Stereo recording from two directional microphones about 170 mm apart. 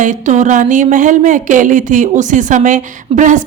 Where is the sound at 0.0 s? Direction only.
45° right (ahead or behind).